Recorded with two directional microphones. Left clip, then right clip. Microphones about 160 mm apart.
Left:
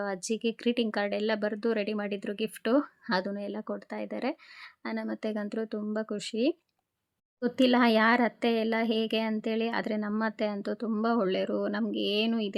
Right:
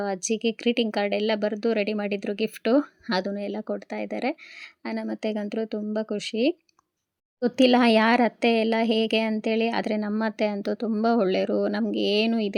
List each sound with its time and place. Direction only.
0.0 s a woman's voice: 15° right (ahead or behind)